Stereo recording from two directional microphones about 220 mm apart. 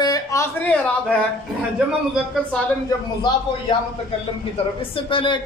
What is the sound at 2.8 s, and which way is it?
Speech, 20° left (ahead or behind).